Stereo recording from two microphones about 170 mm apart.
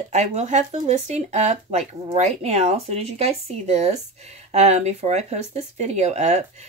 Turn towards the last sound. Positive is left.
turn(degrees=-40)  # may be behind; listen again after turning